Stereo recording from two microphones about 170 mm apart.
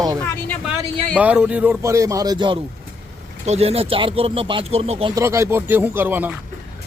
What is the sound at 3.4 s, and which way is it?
Speech, 40° right (ahead or behind).